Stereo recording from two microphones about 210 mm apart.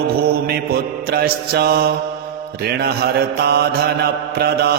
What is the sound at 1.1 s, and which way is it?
Mantra, 50° right (ahead or behind).